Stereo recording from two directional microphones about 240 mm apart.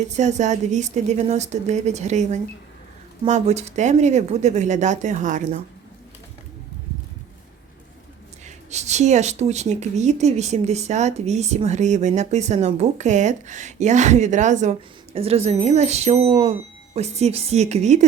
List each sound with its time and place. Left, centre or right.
0.1 s speech: right
8.4 s speech: right